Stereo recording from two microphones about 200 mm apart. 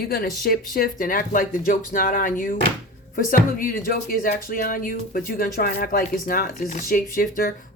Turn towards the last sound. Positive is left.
turn(degrees=45)  # may be behind; listen again after turning